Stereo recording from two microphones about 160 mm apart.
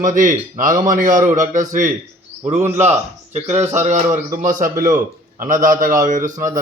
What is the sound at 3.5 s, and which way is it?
A man's voice, 45° right (ahead or behind).